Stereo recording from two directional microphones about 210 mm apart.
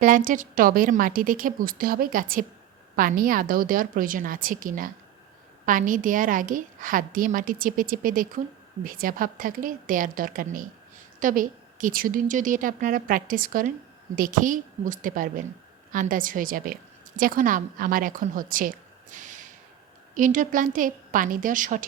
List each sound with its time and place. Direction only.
0.0 s a woman's voice: 40° right (ahead or behind)
19.1 s a sound: 35° right (ahead or behind)
20.1 s a woman's voice: 40° right (ahead or behind)